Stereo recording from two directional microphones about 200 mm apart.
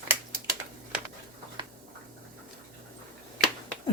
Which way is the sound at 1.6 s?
25° right (ahead or behind).